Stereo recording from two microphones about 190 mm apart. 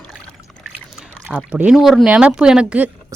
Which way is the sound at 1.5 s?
5° right (ahead or behind).